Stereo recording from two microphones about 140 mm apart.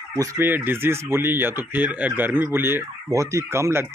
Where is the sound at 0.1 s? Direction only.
25° right (ahead or behind).